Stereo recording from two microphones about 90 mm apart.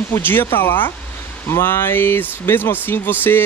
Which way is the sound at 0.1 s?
25° left (ahead or behind).